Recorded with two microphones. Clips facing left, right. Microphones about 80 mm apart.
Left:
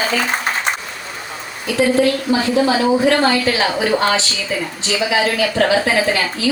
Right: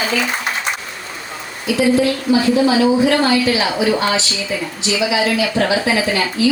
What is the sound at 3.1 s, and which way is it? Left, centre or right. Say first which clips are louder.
A woman's voice: even; left.